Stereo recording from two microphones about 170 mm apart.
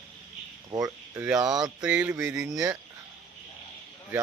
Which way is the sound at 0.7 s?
20° right (ahead or behind).